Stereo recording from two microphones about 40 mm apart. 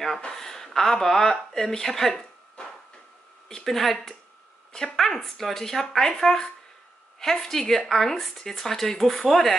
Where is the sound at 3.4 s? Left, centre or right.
Centre.